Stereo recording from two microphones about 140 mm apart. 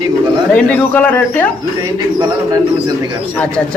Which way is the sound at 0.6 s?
10° left (ahead or behind).